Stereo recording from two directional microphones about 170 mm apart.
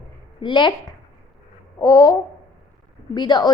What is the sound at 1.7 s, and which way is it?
Babbling, 20° left (ahead or behind).